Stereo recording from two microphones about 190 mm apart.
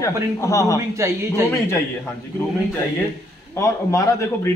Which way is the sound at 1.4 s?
15° left (ahead or behind).